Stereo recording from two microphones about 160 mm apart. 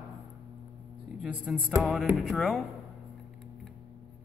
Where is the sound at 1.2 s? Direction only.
5° right (ahead or behind).